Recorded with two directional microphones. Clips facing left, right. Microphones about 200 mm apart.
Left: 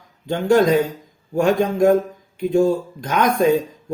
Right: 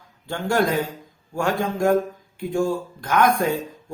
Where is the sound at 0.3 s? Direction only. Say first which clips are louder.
Left 6 dB; 20° left (ahead or behind).